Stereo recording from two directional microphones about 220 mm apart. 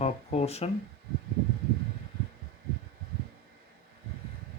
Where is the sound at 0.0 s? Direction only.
30° left (ahead or behind).